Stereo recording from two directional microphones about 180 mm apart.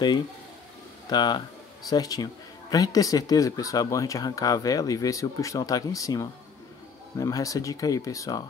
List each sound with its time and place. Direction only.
1.1 s speech: 25° left (ahead or behind)